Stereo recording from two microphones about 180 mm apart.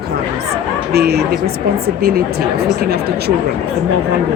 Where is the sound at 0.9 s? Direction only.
60° right (ahead or behind).